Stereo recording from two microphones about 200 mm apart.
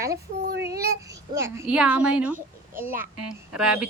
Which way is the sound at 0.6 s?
15° right (ahead or behind).